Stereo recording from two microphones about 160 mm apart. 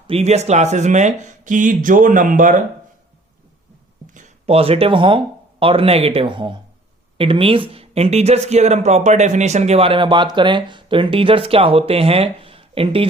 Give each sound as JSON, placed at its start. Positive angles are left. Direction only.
{"t": 0.1, "sound": "speech", "side_deg": -40}
{"t": 4.1, "sound": "speech", "side_deg": -45}